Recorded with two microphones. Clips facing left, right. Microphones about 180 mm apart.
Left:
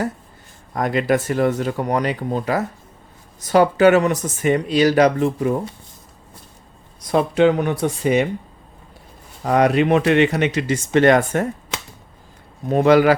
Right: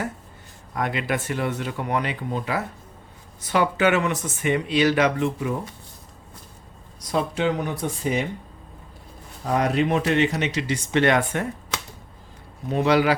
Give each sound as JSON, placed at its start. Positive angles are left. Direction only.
{"t": 0.7, "sound": "speech", "side_deg": 40}
{"t": 7.0, "sound": "speech", "side_deg": 60}
{"t": 9.4, "sound": "speech", "side_deg": 75}
{"t": 12.6, "sound": "speech", "side_deg": 50}